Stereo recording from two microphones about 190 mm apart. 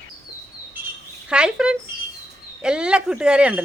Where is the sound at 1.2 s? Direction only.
5° right (ahead or behind).